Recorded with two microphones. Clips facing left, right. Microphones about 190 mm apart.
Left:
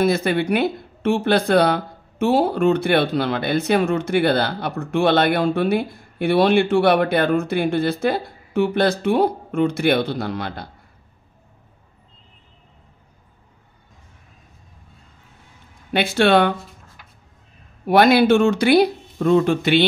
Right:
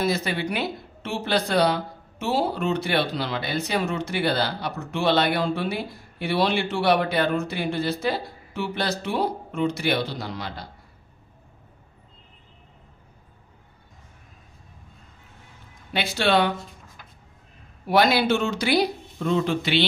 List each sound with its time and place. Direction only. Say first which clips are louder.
0.0 s speech: left 6 dB; 55° left (ahead or behind)
15.9 s speech: left 6 dB; 55° left (ahead or behind)
17.8 s speech: left 6 dB; 55° left (ahead or behind)